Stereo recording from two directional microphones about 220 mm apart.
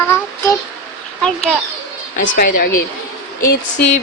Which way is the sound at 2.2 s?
40° left (ahead or behind).